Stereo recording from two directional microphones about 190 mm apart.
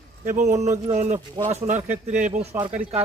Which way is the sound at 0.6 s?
40° right (ahead or behind).